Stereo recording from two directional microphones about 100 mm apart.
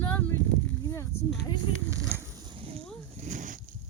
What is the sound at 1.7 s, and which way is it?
Speech, 55° left (ahead or behind).